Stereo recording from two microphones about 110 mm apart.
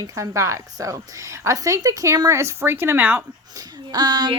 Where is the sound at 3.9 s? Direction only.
40° right (ahead or behind).